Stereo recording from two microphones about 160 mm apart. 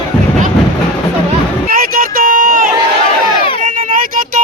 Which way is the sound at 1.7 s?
60° right (ahead or behind).